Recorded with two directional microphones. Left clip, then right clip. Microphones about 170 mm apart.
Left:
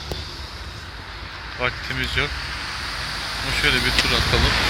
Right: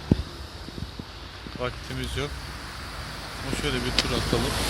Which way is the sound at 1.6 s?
10° right (ahead or behind).